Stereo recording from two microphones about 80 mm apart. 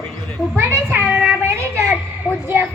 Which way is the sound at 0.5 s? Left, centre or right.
Right.